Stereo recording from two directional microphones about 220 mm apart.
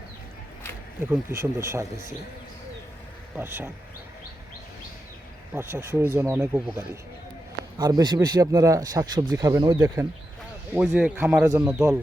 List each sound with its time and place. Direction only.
1.1 s speech: 10° right (ahead or behind)
3.3 s speech: 10° right (ahead or behind)
5.5 s speech: 10° right (ahead or behind)
10.8 s speech: 5° right (ahead or behind)